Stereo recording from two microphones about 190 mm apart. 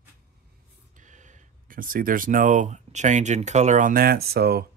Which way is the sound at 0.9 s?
40° right (ahead or behind).